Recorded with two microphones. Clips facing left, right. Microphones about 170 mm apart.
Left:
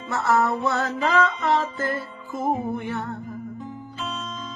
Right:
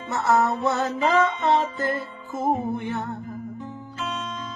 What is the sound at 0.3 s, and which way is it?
Music, 20° right (ahead or behind).